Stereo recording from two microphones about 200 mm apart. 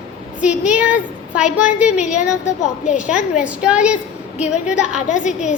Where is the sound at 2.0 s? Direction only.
35° left (ahead or behind).